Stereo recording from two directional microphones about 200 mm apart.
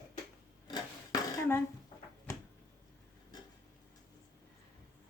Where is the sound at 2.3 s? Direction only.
15° left (ahead or behind).